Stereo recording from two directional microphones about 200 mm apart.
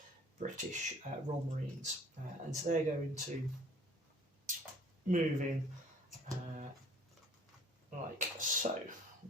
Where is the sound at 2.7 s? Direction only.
40° right (ahead or behind).